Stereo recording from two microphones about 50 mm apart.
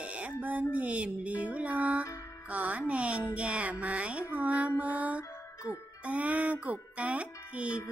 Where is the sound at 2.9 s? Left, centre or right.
Right.